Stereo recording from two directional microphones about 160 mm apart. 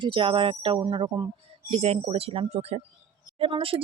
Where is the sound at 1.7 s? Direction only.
40° right (ahead or behind).